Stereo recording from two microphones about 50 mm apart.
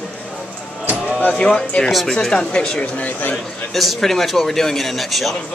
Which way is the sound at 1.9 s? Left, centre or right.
Centre.